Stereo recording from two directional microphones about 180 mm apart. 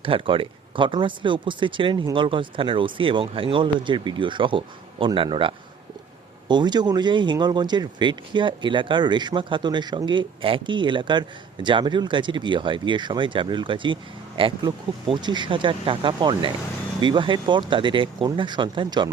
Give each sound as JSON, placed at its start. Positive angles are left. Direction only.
{"t": 0.0, "sound": "speech", "side_deg": -30}